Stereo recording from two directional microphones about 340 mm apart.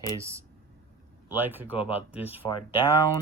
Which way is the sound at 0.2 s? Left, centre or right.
Centre.